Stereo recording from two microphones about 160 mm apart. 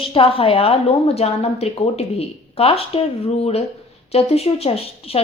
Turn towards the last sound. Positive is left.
turn(degrees=40)  # may be behind; listen again after turning